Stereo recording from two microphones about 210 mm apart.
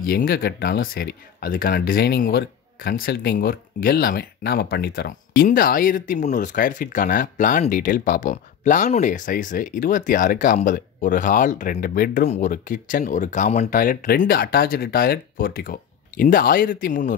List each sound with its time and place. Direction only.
0.0 s speech: 45° left (ahead or behind)